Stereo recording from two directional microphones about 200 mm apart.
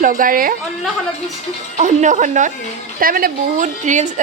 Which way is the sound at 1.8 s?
35° right (ahead or behind).